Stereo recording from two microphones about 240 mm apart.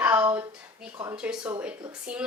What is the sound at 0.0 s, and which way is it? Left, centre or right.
A woman's voice, centre.